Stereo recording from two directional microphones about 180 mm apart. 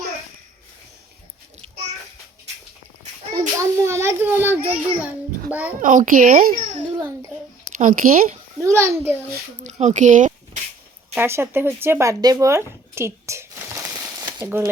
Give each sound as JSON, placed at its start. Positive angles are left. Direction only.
{"t": 3.3, "sound": "a sound", "side_deg": -15}
{"t": 5.5, "sound": "a child's voice", "side_deg": -10}
{"t": 5.8, "sound": "speech", "side_deg": -45}
{"t": 7.8, "sound": "speech", "side_deg": -50}
{"t": 8.6, "sound": "a child's voice", "side_deg": -15}
{"t": 9.6, "sound": "a sound", "side_deg": -40}
{"t": 11.1, "sound": "speech", "side_deg": -15}